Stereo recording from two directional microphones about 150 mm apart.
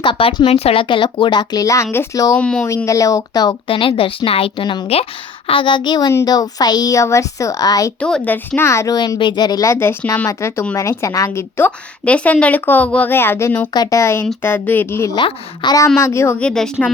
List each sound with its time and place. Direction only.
0.0 s speech: 35° left (ahead or behind); by 2.3 s 20° left (ahead or behind)
2.4 s a woman's voice: 5° left (ahead or behind)
2.6 s speech: 20° left (ahead or behind)
8.0 s a woman's voice: 10° left (ahead or behind)
15.1 s a woman's voice: 30° left (ahead or behind)
16.4 s speech: 5° left (ahead or behind)